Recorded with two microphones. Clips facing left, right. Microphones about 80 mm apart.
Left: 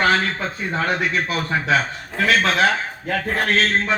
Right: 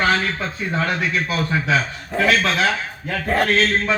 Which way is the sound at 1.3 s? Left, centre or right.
Left.